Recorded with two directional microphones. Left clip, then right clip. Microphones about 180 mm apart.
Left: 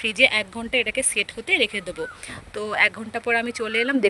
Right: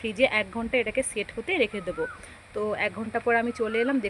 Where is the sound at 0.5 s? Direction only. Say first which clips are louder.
Left 3 dB; centre (ahead or behind).